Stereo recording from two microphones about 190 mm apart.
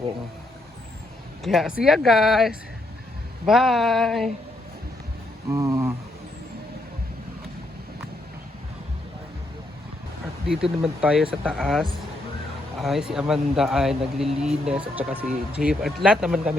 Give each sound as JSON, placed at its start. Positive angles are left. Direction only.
{"t": 1.5, "sound": "speech", "side_deg": 0}
{"t": 5.5, "sound": "speech", "side_deg": -15}
{"t": 10.4, "sound": "speech", "side_deg": -5}